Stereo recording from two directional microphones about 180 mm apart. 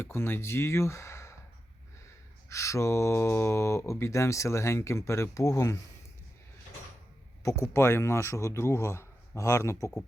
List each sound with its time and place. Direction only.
0.0 s speech: 10° left (ahead or behind)
2.5 s speech: 15° left (ahead or behind)
7.4 s speech: 15° left (ahead or behind)